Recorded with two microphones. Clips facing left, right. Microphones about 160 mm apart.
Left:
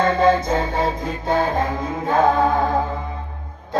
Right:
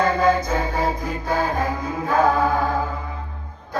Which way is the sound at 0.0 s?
25° left (ahead or behind).